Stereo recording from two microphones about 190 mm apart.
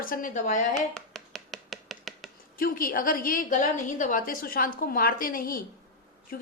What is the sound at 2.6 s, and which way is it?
A woman's voice, 50° left (ahead or behind).